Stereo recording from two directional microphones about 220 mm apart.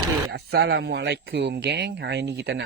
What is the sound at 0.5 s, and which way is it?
Speech, 45° right (ahead or behind).